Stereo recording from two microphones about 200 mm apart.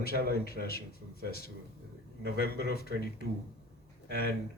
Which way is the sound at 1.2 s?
50° left (ahead or behind).